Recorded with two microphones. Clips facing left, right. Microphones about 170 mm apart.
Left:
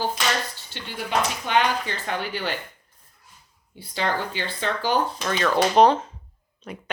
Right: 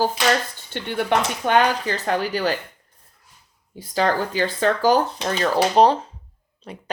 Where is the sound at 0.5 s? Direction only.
55° right (ahead or behind).